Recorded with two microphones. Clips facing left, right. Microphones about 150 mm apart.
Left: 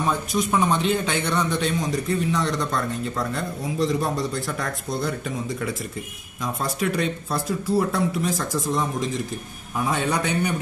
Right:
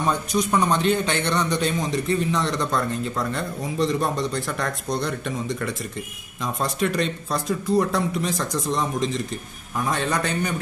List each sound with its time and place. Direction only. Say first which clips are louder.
0.1 s a man's voice: right 2 dB; centre (ahead or behind)